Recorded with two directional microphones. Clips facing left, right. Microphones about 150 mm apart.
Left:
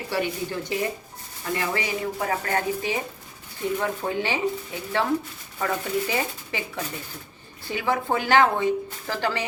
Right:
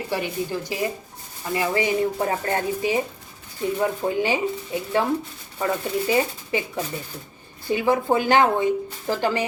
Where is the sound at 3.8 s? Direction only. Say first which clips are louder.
Right 7 dB; 15° right (ahead or behind).